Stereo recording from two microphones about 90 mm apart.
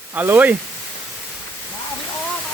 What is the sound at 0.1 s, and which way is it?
Speech, 20° right (ahead or behind).